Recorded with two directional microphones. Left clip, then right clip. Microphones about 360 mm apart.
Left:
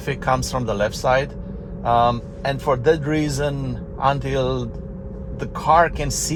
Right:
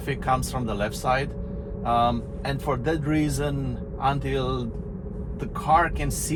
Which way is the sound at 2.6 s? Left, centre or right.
Left.